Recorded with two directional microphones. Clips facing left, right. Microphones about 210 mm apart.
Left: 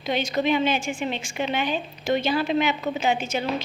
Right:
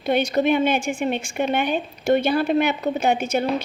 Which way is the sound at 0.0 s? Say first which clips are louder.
Right 5 dB; 55° right (ahead or behind).